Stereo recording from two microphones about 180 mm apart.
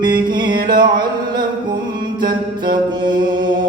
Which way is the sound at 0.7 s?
25° right (ahead or behind).